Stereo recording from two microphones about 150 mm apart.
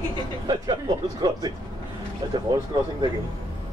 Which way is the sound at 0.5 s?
25° right (ahead or behind).